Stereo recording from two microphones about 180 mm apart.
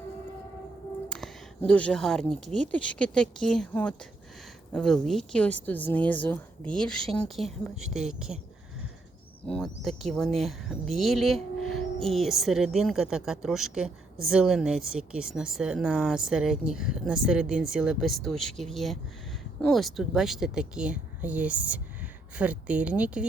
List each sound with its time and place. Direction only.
1.1 s speech: 5° left (ahead or behind)
9.5 s speech: centre (ahead or behind)